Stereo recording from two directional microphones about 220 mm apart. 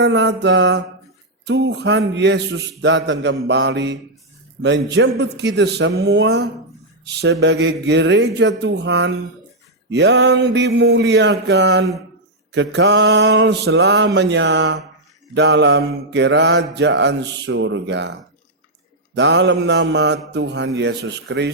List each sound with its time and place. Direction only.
0.0 s mantra: 50° right (ahead or behind)